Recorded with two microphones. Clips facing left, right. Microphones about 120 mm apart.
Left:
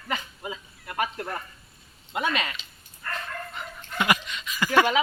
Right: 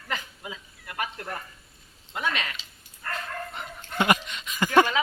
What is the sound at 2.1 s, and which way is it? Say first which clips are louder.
Speech: left 3 dB; 10° left (ahead or behind).